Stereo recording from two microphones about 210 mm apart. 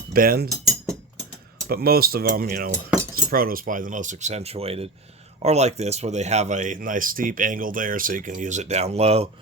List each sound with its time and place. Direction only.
0.1 s speech: 45° right (ahead or behind)
0.5 s cutlery: 15° right (ahead or behind)
1.6 s speech: 45° right (ahead or behind); by 9.2 s 30° right (ahead or behind)